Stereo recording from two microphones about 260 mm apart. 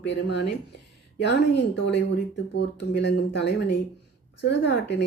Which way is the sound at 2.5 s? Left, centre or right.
Left.